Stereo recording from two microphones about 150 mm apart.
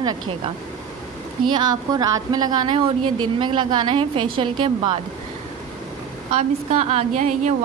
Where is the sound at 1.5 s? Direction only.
30° right (ahead or behind).